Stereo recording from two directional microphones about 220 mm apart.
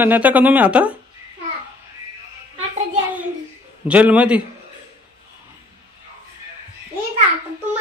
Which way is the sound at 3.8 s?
5° right (ahead or behind).